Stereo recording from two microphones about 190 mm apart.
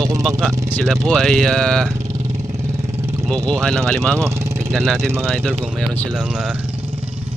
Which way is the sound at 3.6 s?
5° left (ahead or behind).